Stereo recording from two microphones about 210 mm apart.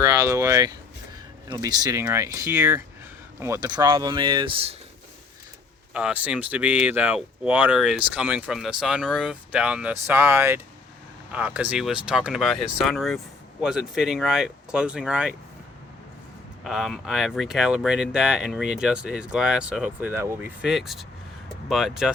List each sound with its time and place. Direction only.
0.0 s speech: 15° right (ahead or behind)
5.9 s speech: 5° right (ahead or behind)
16.6 s speech: centre (ahead or behind)